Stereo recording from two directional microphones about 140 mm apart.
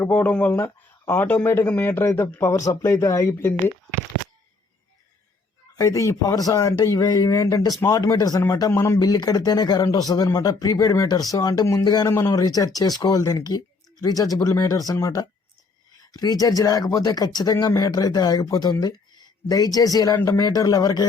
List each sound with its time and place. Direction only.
0.0 s speech: 15° left (ahead or behind)
5.7 s a man's voice: 25° left (ahead or behind)